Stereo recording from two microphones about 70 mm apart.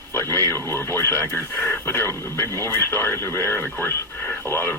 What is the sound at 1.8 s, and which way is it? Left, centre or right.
Speech, left.